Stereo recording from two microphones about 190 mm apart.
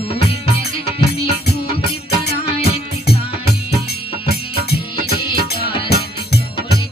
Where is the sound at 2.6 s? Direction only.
55° left (ahead or behind).